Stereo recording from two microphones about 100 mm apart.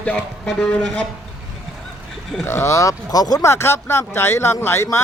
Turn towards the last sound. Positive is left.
turn(degrees=25)  # may be behind; listen again after turning